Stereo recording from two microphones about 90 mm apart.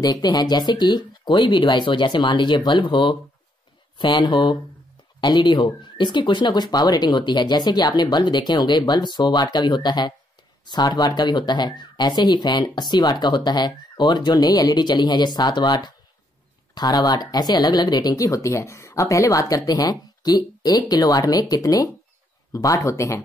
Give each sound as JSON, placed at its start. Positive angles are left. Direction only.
{"t": 0.0, "sound": "speech", "side_deg": 45}
{"t": 14.3, "sound": "speech", "side_deg": 45}